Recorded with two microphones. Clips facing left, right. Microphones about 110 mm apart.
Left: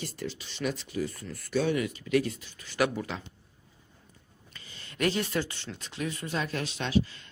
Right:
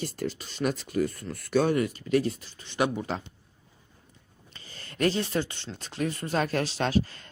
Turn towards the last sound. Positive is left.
turn(degrees=-45)  # may be behind; listen again after turning